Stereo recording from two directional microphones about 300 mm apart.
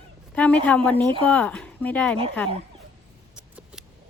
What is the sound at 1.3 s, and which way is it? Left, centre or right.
Speech, centre.